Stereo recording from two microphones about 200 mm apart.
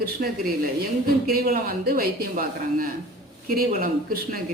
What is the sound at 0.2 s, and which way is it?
A woman's voice, 45° right (ahead or behind).